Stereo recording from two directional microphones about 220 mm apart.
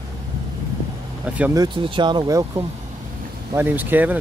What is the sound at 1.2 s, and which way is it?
Speech, 5° right (ahead or behind).